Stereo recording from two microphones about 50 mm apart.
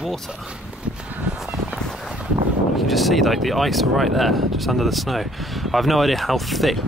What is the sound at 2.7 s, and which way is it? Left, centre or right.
Speech, centre.